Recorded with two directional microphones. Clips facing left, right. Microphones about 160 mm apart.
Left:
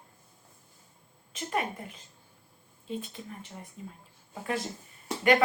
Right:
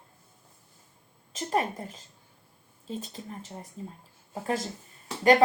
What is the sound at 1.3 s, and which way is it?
A woman's voice, 35° right (ahead or behind).